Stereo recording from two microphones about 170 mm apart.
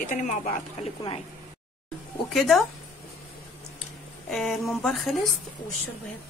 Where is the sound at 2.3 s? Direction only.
Centre (ahead or behind).